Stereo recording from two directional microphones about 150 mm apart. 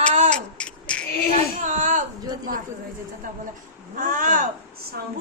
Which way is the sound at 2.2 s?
25° right (ahead or behind).